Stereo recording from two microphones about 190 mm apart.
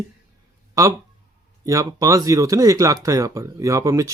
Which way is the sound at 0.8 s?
20° right (ahead or behind).